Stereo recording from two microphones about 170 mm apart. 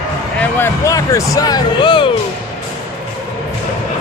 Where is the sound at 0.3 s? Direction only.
15° left (ahead or behind).